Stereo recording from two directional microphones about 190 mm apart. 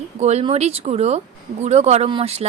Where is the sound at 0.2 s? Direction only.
35° right (ahead or behind).